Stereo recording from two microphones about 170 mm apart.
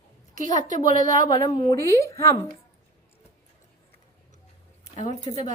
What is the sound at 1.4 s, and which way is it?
Speech, 25° left (ahead or behind).